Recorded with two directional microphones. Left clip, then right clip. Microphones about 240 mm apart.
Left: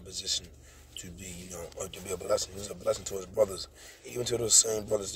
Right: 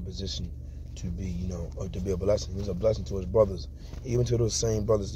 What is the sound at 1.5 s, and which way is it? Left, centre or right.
Speech, centre.